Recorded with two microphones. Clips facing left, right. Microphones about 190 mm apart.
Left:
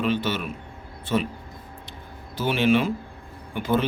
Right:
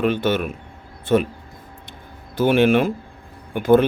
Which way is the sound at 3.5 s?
55° right (ahead or behind).